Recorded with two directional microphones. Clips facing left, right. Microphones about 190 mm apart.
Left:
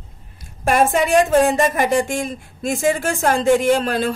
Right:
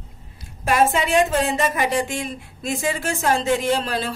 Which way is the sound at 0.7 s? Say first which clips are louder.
Left 3 dB; 45° left (ahead or behind).